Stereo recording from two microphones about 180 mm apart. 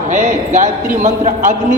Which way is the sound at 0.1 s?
40° right (ahead or behind).